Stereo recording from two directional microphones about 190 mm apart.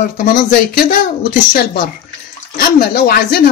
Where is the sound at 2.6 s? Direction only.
50° left (ahead or behind).